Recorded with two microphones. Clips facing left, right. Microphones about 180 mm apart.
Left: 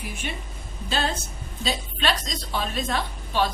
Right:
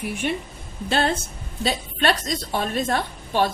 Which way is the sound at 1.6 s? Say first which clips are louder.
Right 4 dB; 55° right (ahead or behind).